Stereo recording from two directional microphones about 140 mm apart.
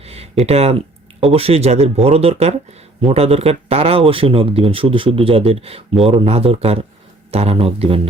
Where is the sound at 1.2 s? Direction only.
45° right (ahead or behind).